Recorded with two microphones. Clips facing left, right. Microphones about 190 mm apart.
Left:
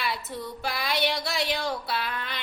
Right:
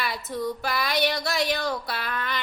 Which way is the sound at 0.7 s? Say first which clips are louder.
Even; 45° right (ahead or behind).